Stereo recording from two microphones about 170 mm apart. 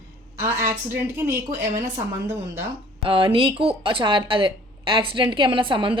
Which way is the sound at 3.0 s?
35° right (ahead or behind).